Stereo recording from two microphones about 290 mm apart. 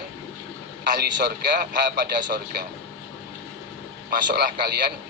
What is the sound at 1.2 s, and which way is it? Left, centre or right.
A man's voice, right.